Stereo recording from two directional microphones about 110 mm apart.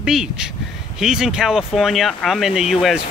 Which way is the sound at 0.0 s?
5° right (ahead or behind).